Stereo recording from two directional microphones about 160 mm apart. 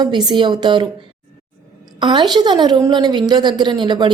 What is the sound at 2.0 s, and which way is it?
A woman's voice, 30° right (ahead or behind).